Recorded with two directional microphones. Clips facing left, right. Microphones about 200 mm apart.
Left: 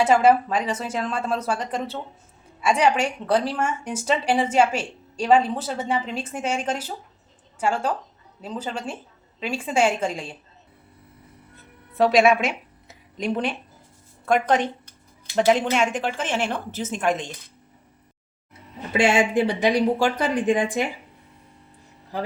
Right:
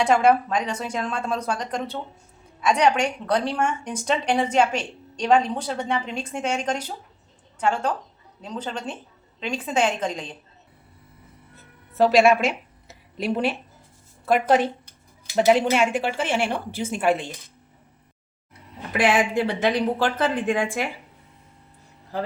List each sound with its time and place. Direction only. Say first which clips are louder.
0.0 s a woman's voice: left 1 dB; 5° left (ahead or behind)
11.9 s a woman's voice: right 1 dB; centre (ahead or behind)
18.9 s speech: left 1 dB; 25° left (ahead or behind)